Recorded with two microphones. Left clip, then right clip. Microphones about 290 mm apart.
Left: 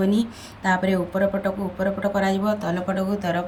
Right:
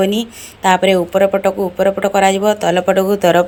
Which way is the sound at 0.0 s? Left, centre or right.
Centre.